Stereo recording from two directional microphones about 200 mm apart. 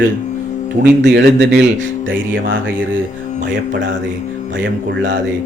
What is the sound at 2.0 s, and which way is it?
Speech, 70° right (ahead or behind).